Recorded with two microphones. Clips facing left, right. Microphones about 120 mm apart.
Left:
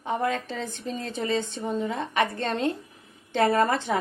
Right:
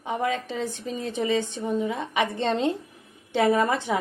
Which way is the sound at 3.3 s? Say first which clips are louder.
Even; 10° right (ahead or behind).